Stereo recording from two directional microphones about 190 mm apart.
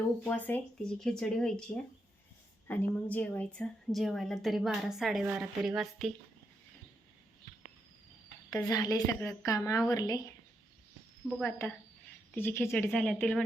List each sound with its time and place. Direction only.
0.3 s a woman's voice: 10° left (ahead or behind)
8.4 s a woman's voice: 20° left (ahead or behind)
11.4 s a woman's voice: 15° left (ahead or behind)